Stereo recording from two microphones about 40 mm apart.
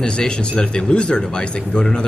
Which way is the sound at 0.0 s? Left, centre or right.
Left.